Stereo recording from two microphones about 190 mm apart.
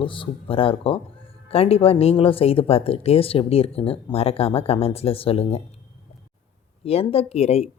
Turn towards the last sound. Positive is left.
turn(degrees=30)  # may be behind; listen again after turning